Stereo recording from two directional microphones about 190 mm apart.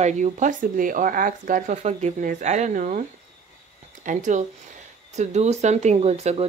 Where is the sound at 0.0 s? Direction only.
40° right (ahead or behind).